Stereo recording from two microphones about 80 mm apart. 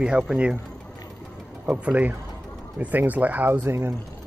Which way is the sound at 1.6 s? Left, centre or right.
Centre.